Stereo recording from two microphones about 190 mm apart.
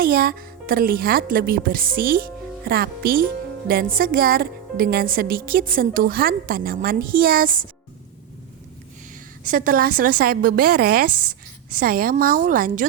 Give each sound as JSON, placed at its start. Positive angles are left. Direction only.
{"t": 0.0, "sound": "speech", "side_deg": -50}
{"t": 9.5, "sound": "speech", "side_deg": -45}